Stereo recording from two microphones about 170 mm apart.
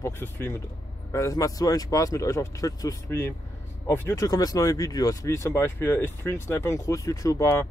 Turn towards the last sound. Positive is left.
turn(degrees=15)  # may be behind; listen again after turning